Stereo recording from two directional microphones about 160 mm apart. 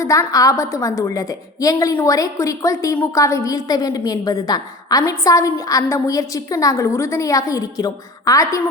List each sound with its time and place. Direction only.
0.0 s a woman's voice: 20° left (ahead or behind)